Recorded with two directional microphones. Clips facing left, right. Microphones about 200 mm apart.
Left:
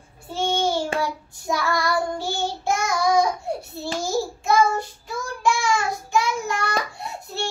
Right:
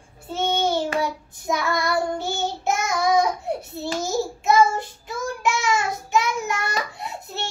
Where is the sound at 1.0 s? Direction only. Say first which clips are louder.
Right 1 dB; 20° right (ahead or behind).